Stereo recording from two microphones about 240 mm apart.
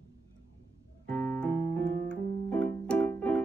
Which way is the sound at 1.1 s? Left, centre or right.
Centre.